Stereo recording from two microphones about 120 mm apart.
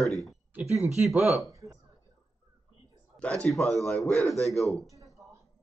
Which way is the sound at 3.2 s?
5° left (ahead or behind).